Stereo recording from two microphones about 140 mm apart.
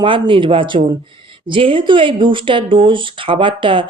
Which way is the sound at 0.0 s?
35° right (ahead or behind).